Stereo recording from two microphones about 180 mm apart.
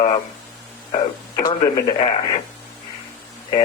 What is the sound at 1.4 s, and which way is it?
Speech, 25° left (ahead or behind).